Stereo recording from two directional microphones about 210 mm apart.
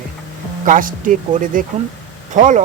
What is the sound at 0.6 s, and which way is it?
Speech, 40° right (ahead or behind).